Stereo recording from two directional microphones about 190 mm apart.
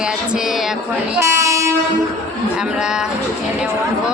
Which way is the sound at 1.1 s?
15° right (ahead or behind).